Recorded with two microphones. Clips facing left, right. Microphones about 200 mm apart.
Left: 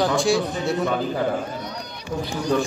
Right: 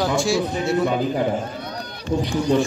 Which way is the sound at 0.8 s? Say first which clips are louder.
Right 2 dB; 15° right (ahead or behind).